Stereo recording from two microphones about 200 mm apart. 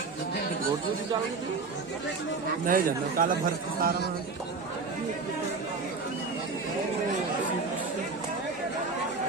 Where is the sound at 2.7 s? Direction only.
45° right (ahead or behind).